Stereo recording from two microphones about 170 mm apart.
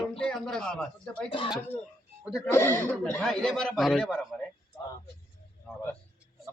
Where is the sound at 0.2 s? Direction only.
5° left (ahead or behind).